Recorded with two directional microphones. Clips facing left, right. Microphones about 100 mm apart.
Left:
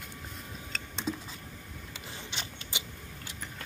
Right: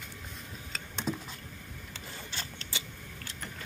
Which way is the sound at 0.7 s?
5° right (ahead or behind).